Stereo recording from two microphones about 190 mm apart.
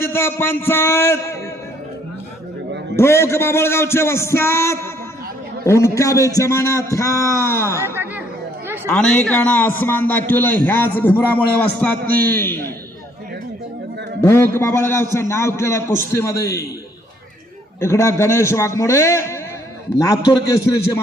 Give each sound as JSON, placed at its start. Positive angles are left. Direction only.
{"t": 0.0, "sound": "a man's voice", "side_deg": 10}
{"t": 2.9, "sound": "a man's voice", "side_deg": 15}
{"t": 7.8, "sound": "chatter", "side_deg": -10}
{"t": 8.9, "sound": "a man's voice", "side_deg": 5}
{"t": 14.2, "sound": "a man's voice", "side_deg": 15}
{"t": 17.7, "sound": "a man's voice", "side_deg": 15}